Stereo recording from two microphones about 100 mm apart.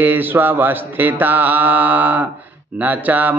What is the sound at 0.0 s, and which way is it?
Mantra, 20° right (ahead or behind).